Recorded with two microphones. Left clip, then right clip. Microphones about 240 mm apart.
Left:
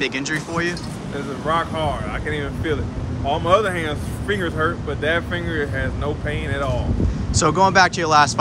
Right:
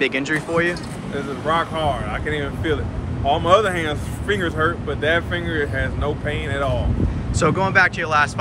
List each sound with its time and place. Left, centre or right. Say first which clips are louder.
0.0 s speech: right 3 dB; centre